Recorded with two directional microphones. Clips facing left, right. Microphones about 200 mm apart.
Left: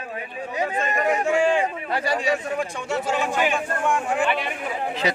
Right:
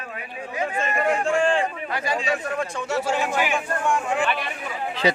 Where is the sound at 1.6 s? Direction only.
30° left (ahead or behind).